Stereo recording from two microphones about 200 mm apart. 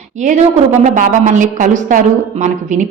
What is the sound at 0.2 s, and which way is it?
A woman's voice, 35° right (ahead or behind).